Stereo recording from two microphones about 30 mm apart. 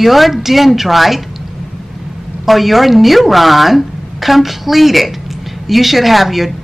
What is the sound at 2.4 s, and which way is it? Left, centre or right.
Speech, centre.